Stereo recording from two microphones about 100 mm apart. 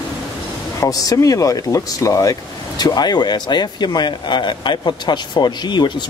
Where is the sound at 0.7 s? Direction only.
35° left (ahead or behind).